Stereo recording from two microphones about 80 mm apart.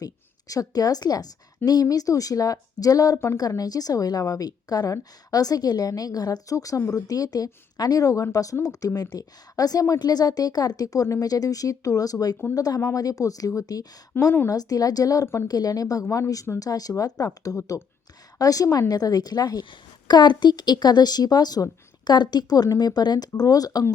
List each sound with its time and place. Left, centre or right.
0.0 s a woman's voice: left
20.1 s a woman's voice: left